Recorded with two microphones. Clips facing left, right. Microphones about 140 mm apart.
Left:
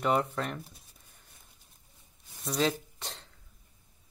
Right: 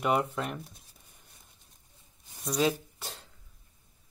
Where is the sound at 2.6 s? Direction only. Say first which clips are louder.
Right 1 dB; 5° right (ahead or behind).